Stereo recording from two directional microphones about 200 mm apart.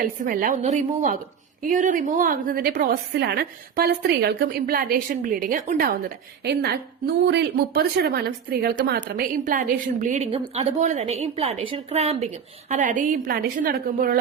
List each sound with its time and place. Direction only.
0.0 s a woman's voice: 45° right (ahead or behind)